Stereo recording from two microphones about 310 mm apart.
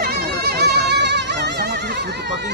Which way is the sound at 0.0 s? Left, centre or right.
Right.